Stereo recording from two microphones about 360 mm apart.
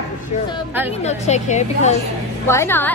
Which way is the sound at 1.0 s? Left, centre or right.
Centre.